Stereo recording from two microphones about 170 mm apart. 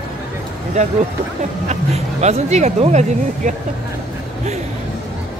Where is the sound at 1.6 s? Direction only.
40° right (ahead or behind).